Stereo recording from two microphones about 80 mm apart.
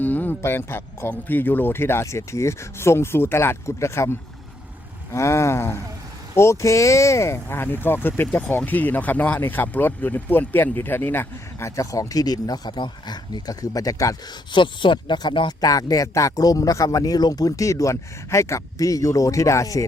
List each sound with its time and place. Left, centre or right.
0.0 s speech: left
11.6 s speech: left
12.7 s speech: left
14.5 s speech: left
15.6 s speech: left